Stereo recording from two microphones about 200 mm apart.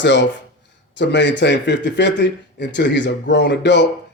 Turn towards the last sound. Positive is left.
turn(degrees=60)  # may be behind; listen again after turning